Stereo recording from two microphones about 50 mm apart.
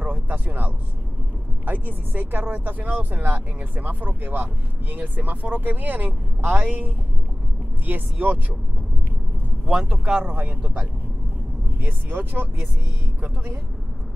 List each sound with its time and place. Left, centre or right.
0.0 s a sound: right
1.7 s speech: right
9.7 s speech: right
10.2 s speech: right
10.6 s speech: right
11.8 s speech: right